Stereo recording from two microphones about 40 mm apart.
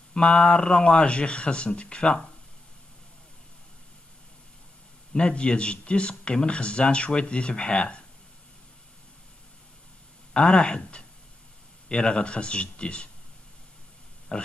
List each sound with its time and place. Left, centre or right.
0.1 s speech: left
5.1 s speech: left
10.3 s speech: left
14.3 s speech: left